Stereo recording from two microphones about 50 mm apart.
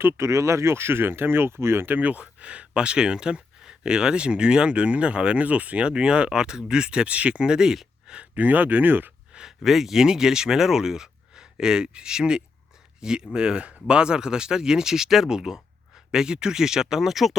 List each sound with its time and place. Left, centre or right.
0.0 s speech: right
0.3 s speech: right
1.9 s speech: right
8.4 s speech: right
9.3 s speech: centre